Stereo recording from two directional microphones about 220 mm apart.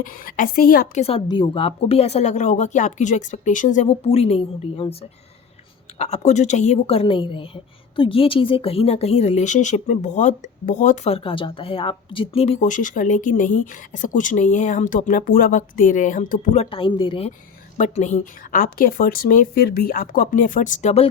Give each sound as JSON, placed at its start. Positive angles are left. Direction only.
{"t": 0.0, "sound": "a woman's voice", "side_deg": 40}
{"t": 1.0, "sound": "a woman's voice", "side_deg": 25}
{"t": 6.0, "sound": "a woman's voice", "side_deg": 30}